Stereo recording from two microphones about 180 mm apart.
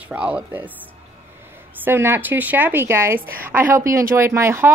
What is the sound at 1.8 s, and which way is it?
A woman's voice, 10° right (ahead or behind).